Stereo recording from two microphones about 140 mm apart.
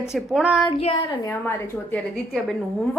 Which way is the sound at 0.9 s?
30° left (ahead or behind).